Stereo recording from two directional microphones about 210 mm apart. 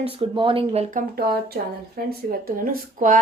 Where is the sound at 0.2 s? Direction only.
25° right (ahead or behind).